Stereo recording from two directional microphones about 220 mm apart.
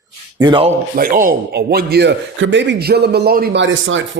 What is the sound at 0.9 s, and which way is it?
Speech, 40° right (ahead or behind).